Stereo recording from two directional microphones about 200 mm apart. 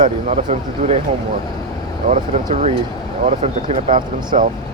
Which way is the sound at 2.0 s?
40° right (ahead or behind).